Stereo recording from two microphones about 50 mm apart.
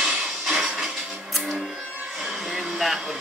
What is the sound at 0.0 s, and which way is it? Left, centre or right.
Music, centre.